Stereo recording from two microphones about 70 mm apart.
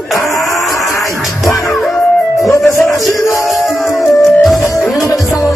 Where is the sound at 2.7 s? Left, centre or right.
Left.